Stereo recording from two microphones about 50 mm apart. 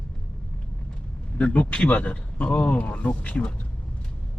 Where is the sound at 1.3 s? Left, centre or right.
Left.